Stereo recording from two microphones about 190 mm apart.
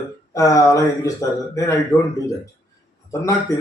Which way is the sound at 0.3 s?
15° left (ahead or behind).